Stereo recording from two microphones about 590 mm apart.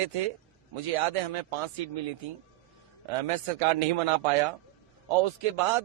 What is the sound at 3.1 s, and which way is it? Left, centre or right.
A man's voice, right.